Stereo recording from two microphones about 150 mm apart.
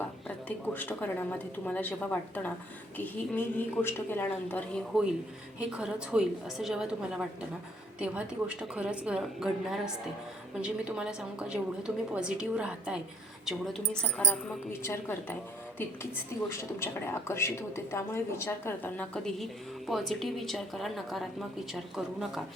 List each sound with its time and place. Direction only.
0.3 s a woman's voice: 10° left (ahead or behind)
5.5 s a woman's voice: 5° right (ahead or behind)
14.7 s a woman's voice: 15° left (ahead or behind)
16.5 s a woman's voice: 20° left (ahead or behind); by 22.3 s centre (ahead or behind)